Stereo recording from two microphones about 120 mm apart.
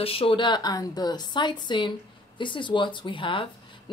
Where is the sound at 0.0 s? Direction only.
50° left (ahead or behind).